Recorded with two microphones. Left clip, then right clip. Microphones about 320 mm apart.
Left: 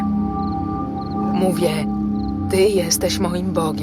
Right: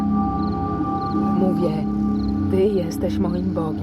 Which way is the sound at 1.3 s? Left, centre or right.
Left.